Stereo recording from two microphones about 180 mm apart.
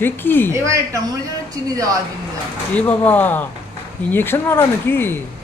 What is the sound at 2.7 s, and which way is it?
Speech, 10° left (ahead or behind).